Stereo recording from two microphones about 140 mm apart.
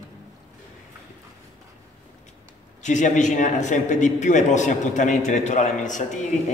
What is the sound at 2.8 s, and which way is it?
A man's voice, 60° left (ahead or behind).